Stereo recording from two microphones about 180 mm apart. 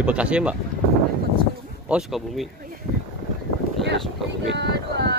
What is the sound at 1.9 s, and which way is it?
Speech, centre (ahead or behind).